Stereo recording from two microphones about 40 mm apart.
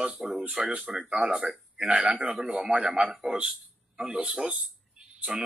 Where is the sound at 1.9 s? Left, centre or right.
Right.